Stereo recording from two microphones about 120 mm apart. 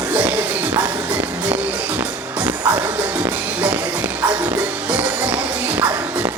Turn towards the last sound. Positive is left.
turn(degrees=-15)  # may be behind; listen again after turning